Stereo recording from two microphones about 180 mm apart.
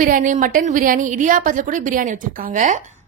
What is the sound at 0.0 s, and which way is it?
A woman's voice, 45° right (ahead or behind).